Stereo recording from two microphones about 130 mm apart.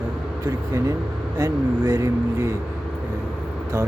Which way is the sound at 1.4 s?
25° right (ahead or behind).